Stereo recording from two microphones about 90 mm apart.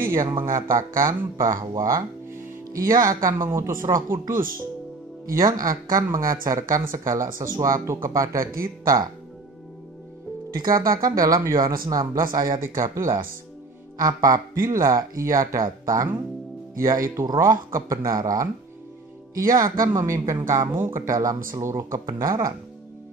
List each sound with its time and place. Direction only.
0.1 s speech: 40° right (ahead or behind)
3.3 s speech: 25° right (ahead or behind)
5.4 s speech: 45° right (ahead or behind)
10.6 s speech: 45° right (ahead or behind)
13.9 s speech: 45° right (ahead or behind)